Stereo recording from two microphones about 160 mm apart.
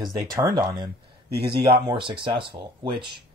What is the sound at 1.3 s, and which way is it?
Speech, 90° right.